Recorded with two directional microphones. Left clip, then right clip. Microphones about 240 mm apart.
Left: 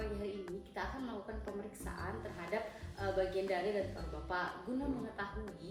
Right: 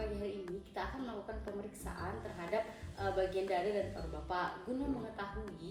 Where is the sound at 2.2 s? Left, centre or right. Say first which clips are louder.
Right 4 dB; centre.